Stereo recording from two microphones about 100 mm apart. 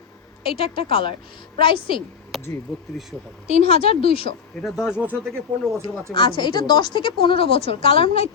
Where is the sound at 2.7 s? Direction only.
Centre (ahead or behind).